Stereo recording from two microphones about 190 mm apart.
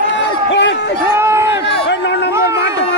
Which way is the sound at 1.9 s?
65° left (ahead or behind).